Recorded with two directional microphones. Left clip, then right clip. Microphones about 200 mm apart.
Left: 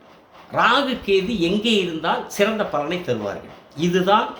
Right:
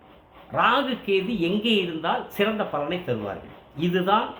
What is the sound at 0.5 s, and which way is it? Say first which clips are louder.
Speech: left 4 dB; 15° left (ahead or behind).